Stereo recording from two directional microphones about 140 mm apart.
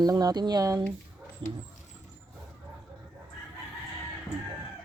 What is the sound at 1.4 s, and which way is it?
Speech, 35° right (ahead or behind).